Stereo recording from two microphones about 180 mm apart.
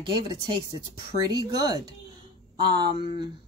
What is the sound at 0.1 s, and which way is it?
Speech, 25° right (ahead or behind).